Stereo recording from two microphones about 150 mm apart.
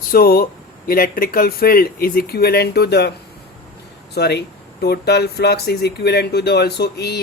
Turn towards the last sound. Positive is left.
turn(degrees=90)